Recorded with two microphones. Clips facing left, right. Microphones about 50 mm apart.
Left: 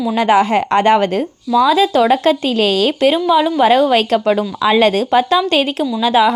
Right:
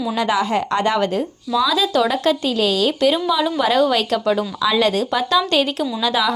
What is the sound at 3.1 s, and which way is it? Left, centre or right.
A woman's voice, left.